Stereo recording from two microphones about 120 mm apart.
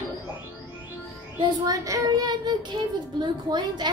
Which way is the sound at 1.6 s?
30° right (ahead or behind).